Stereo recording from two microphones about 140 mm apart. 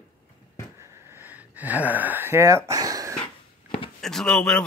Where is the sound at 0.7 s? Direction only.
20° right (ahead or behind).